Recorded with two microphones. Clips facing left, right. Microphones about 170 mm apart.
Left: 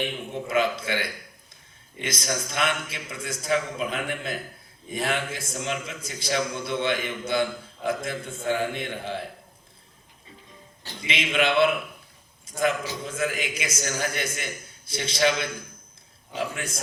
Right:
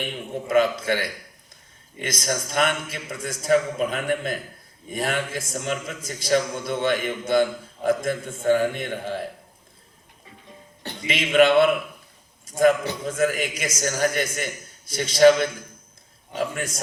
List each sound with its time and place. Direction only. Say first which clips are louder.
0.4 s a man's voice: right 5 dB; 45° right (ahead or behind)
10.8 s a man's voice: right 3 dB; 50° right (ahead or behind)